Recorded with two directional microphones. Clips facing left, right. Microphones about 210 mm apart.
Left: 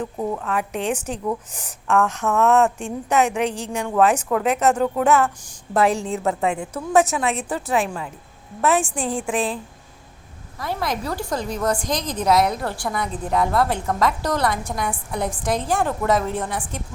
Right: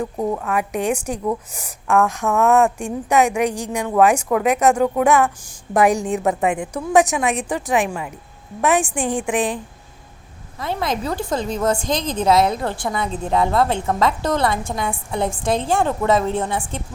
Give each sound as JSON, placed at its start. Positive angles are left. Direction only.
{"t": 0.0, "sound": "a woman's voice", "side_deg": -15}
{"t": 10.6, "sound": "a woman's voice", "side_deg": -25}